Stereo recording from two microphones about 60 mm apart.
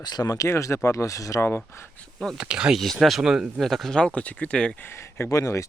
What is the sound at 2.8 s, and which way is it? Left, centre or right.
Speech, centre.